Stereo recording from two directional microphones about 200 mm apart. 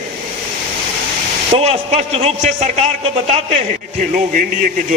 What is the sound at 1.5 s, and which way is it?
A man's voice, 30° right (ahead or behind).